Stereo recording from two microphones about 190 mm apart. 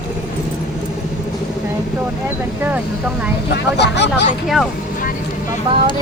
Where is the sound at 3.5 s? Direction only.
60° left (ahead or behind).